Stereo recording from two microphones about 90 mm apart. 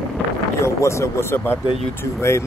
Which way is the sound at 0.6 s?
30° left (ahead or behind).